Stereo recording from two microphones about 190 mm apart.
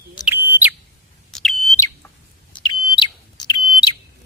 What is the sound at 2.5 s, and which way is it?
Bird, 25° left (ahead or behind).